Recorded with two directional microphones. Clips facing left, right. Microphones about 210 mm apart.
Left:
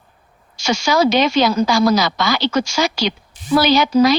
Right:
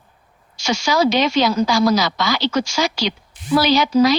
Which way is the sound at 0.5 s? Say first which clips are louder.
Left 2 dB; 55° left (ahead or behind).